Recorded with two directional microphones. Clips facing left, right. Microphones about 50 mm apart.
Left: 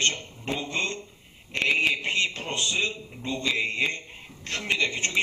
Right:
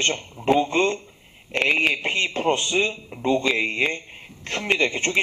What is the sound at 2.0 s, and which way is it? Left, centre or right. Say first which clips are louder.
A man's voice: right 3 dB; right.